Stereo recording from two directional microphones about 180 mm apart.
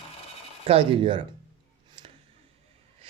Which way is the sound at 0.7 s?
30° right (ahead or behind).